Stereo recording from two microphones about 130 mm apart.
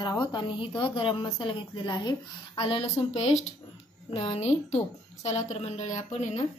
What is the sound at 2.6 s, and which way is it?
A woman's voice, 50° left (ahead or behind).